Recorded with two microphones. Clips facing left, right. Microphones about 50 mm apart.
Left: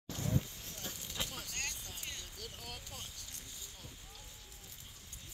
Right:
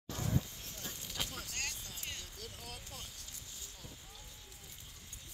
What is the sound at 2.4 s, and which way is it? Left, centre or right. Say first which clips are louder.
Vehicle: left 1 dB; centre.